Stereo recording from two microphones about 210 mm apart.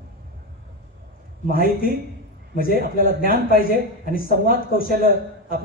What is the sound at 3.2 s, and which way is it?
Speech, 45° left (ahead or behind).